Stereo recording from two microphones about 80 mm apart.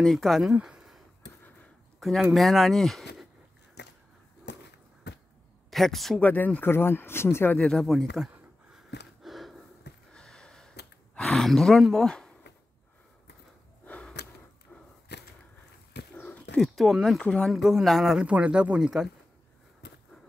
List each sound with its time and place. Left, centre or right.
0.0 s speech: centre
0.5 s a sound: centre
2.3 s speech: centre
5.7 s speech: centre
6.2 s speech: left
7.5 s speech: centre
8.7 s gasp: centre
10.1 s a sound: centre
11.1 s speech: centre
16.2 s a sound: centre
16.5 s speech: centre
17.2 s speech: centre
17.5 s speech: centre
18.2 s speech: centre